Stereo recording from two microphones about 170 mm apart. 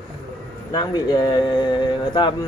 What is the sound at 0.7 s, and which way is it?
Speech, 25° left (ahead or behind).